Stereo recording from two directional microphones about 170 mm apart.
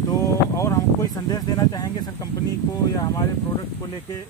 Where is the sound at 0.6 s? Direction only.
15° left (ahead or behind).